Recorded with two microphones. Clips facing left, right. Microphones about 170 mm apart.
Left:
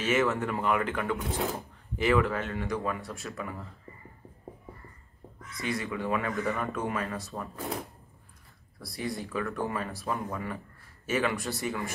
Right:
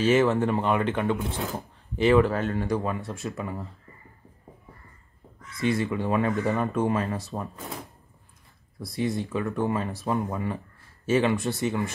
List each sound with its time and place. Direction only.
0.0 s speech: 30° right (ahead or behind)
5.6 s speech: 25° right (ahead or behind)
8.8 s speech: 25° right (ahead or behind)